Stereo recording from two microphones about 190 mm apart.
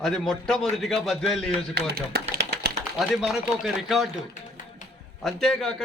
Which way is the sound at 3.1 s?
Centre (ahead or behind).